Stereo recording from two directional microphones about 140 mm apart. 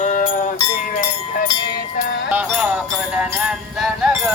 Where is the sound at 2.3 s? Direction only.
10° right (ahead or behind).